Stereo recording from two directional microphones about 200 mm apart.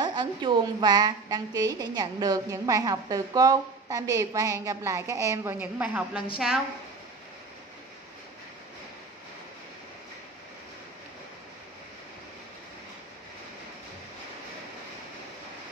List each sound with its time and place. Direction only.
0.0 s a woman's voice: 20° right (ahead or behind); by 6.6 s 5° right (ahead or behind)